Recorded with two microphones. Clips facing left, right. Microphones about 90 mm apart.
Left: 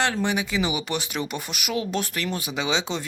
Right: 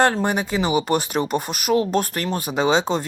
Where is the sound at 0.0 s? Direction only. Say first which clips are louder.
Right 5 dB; 45° right (ahead or behind).